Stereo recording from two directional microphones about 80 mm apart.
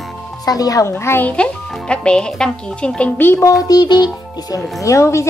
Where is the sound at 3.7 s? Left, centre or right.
Left.